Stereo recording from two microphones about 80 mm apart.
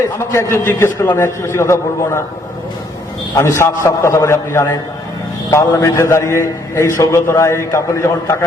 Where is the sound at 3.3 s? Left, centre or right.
Left.